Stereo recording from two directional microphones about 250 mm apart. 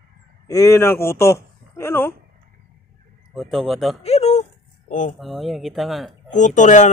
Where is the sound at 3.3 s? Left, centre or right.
Centre.